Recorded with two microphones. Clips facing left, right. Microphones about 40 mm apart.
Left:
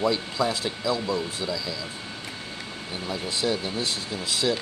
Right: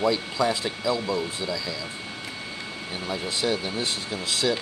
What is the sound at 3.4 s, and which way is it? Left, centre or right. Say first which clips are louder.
Speech: even; centre.